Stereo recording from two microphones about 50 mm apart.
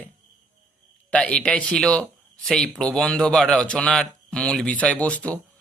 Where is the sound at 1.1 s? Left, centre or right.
Left.